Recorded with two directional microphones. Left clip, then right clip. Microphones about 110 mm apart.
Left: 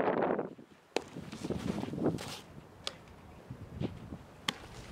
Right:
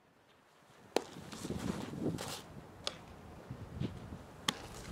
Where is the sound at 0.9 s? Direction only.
10° right (ahead or behind).